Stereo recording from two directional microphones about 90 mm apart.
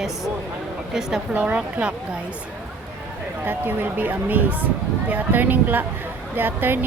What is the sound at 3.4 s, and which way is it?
Speech, 25° right (ahead or behind).